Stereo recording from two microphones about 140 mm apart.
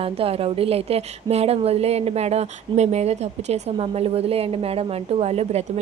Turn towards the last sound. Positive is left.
turn(degrees=-50)  # may be behind; listen again after turning